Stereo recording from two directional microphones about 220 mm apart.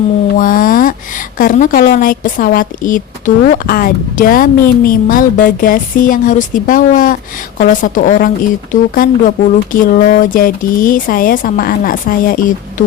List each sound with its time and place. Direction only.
0.3 s a woman's voice: 40° left (ahead or behind)